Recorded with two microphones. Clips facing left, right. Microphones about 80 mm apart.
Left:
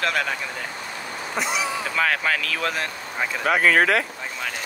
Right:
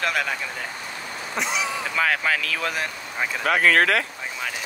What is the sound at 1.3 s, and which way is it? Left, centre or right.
Speech, centre.